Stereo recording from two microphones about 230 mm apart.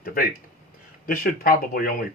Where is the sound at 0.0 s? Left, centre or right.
Left.